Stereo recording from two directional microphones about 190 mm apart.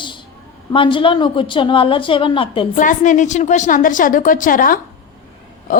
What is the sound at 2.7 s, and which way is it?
A woman's voice, 45° left (ahead or behind).